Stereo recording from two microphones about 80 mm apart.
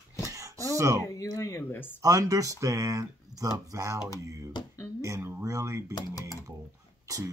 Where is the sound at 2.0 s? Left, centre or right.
Right.